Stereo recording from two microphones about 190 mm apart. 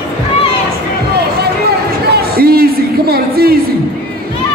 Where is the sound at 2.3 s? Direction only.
55° right (ahead or behind).